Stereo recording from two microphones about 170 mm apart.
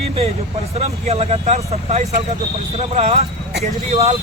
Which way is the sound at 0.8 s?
40° right (ahead or behind).